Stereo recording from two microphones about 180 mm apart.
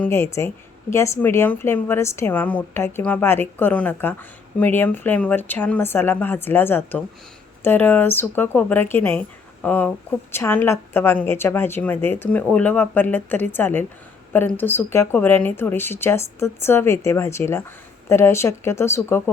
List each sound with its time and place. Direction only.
0.0 s a woman's voice: 15° left (ahead or behind)